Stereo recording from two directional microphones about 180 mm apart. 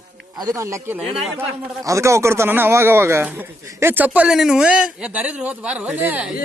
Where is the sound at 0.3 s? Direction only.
20° right (ahead or behind).